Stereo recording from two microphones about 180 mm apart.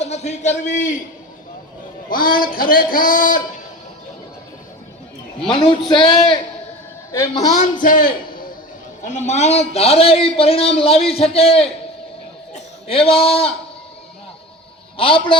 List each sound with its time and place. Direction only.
0.0 s a man's voice: 40° left (ahead or behind)
2.0 s a man's voice: 55° left (ahead or behind)
5.5 s a woman's voice: 30° left (ahead or behind)
7.5 s a man's voice: 45° left (ahead or behind)
14.9 s a woman's voice: 30° left (ahead or behind)